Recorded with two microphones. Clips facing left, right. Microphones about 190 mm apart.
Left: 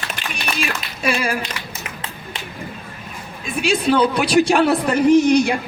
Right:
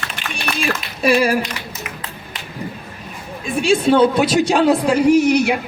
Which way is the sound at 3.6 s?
25° right (ahead or behind).